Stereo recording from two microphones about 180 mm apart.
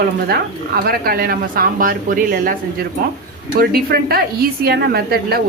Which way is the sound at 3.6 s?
55° right (ahead or behind).